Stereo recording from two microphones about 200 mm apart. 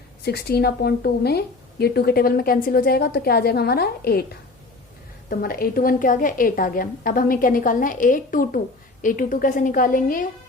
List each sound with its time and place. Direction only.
0.2 s a woman's voice: 55° left (ahead or behind)
5.3 s a woman's voice: 45° left (ahead or behind)